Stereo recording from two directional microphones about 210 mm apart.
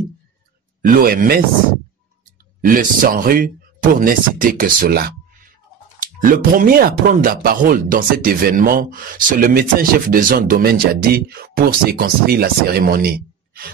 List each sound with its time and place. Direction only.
0.8 s speech: 40° right (ahead or behind)
2.6 s speech: 40° right (ahead or behind)
6.2 s speech: 40° right (ahead or behind)